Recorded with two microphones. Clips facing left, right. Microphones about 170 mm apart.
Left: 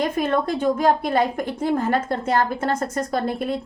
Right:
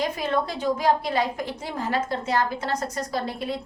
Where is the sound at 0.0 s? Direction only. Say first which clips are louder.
Left 4 dB; 50° left (ahead or behind).